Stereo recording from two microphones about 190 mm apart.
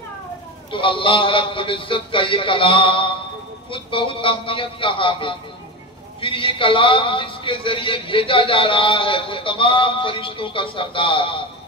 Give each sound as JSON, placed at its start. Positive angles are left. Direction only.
{"t": 0.7, "sound": "a man's voice", "side_deg": 25}